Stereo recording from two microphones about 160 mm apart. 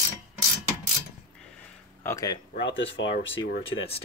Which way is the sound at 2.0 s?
20° left (ahead or behind).